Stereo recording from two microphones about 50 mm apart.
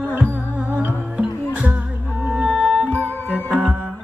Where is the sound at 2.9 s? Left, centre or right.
Left.